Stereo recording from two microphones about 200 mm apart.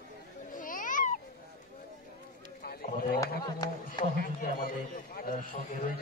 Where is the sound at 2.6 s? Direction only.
50° left (ahead or behind).